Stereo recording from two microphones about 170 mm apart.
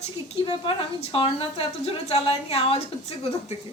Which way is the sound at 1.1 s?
35° left (ahead or behind).